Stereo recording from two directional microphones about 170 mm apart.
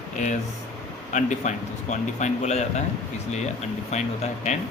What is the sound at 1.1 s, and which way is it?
Speech, 45° left (ahead or behind).